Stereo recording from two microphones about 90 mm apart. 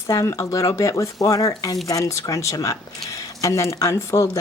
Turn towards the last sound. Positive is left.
turn(degrees=35)  # may be behind; listen again after turning